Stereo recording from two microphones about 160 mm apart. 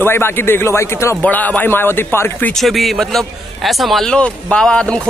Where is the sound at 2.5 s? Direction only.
Centre (ahead or behind).